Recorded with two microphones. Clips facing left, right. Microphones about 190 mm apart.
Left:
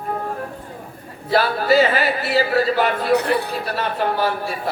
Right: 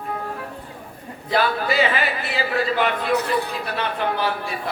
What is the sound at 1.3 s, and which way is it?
A man's voice, 40° left (ahead or behind).